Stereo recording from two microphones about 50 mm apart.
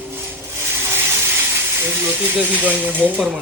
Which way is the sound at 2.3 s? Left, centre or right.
Right.